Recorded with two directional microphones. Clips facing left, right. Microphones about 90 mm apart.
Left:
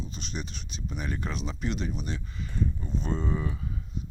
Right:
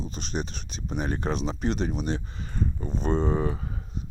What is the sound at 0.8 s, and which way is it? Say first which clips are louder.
Speech: right 6 dB; 35° right (ahead or behind).